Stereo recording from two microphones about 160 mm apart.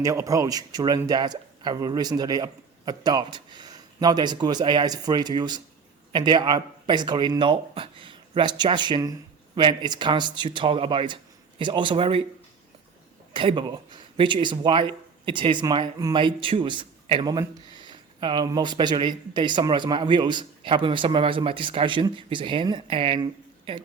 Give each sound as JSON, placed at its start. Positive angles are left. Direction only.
{"t": 0.0, "sound": "speech", "side_deg": -20}
{"t": 13.3, "sound": "speech", "side_deg": -30}